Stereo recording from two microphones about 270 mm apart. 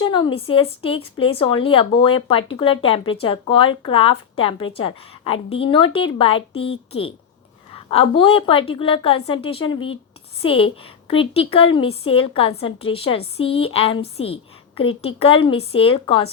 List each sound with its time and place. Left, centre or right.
0.0 s a woman's voice: centre